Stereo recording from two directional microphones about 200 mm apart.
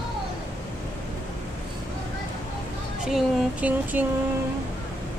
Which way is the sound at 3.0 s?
5° right (ahead or behind).